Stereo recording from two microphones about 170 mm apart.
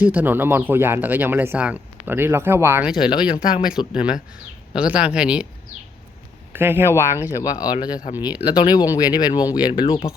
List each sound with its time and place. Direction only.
0.0 s speech: 10° right (ahead or behind)
3.1 s speech: 30° left (ahead or behind)
3.7 s speech: 5° right (ahead or behind)
6.5 s speech: 15° right (ahead or behind)
7.3 s speech: 25° left (ahead or behind)